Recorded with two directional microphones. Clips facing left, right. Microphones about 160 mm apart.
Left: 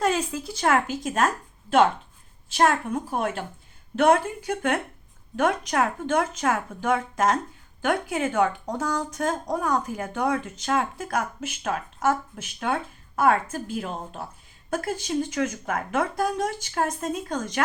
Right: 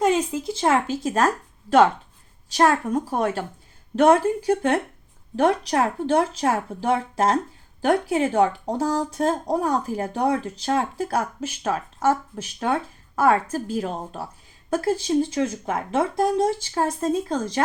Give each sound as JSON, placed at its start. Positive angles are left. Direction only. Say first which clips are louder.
{"t": 0.0, "sound": "speech", "louder": "right 4 dB", "side_deg": -20}
{"t": 2.5, "sound": "speech", "louder": "right 3 dB", "side_deg": -40}